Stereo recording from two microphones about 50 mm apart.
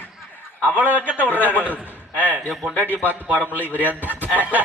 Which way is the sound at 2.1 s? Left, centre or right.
Right.